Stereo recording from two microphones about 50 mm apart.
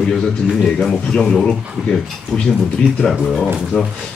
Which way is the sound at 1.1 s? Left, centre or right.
Centre.